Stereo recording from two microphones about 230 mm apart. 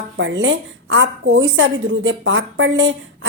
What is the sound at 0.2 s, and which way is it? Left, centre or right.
A woman's voice, right.